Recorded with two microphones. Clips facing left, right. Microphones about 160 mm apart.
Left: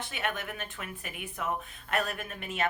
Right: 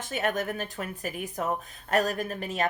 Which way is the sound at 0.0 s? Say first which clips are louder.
Right 6 dB; 40° right (ahead or behind).